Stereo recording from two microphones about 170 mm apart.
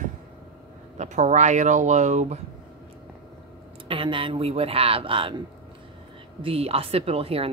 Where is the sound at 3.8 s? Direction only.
30° right (ahead or behind).